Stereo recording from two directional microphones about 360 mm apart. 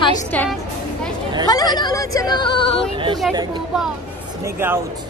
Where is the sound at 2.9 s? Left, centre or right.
Centre.